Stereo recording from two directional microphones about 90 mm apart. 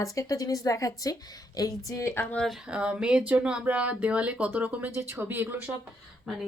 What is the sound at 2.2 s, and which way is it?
Speech, 15° left (ahead or behind).